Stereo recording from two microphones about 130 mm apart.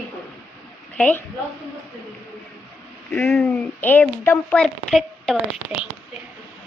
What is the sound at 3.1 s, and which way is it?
A woman's voice, 5° left (ahead or behind).